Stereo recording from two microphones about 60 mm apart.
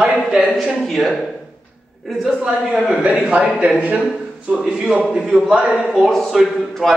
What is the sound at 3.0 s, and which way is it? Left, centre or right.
A man's voice, centre.